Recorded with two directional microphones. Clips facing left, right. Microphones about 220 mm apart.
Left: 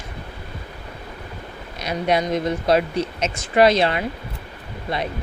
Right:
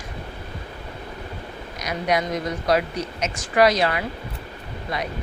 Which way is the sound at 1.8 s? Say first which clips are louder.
Left 3 dB; 25° left (ahead or behind).